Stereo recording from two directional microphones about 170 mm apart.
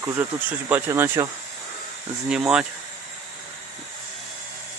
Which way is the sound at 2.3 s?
5° right (ahead or behind).